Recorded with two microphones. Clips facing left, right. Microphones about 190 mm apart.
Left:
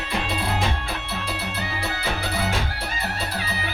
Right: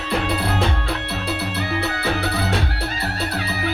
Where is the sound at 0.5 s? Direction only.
65° right (ahead or behind).